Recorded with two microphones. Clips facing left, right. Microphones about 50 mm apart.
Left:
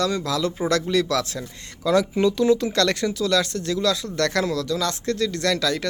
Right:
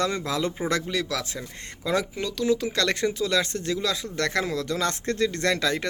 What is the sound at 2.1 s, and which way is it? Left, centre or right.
Speech, centre.